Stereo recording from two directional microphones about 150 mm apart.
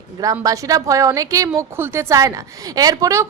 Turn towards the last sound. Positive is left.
turn(degrees=-20)  # may be behind; listen again after turning